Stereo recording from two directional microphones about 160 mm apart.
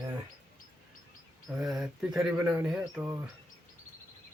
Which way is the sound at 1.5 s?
Centre (ahead or behind).